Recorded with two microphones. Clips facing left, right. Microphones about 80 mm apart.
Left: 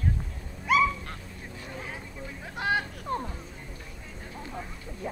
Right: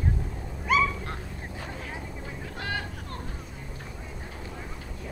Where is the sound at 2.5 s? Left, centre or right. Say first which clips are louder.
Left 6 dB; left.